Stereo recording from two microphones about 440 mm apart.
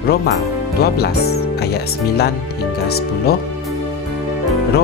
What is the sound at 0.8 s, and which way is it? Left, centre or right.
Speech, left.